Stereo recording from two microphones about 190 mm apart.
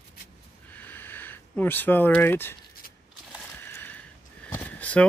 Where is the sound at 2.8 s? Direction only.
50° left (ahead or behind).